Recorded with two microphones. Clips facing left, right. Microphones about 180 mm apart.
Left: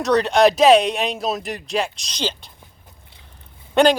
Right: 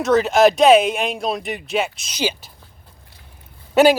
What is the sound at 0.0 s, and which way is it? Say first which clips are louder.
Speech: right 1 dB; centre (ahead or behind).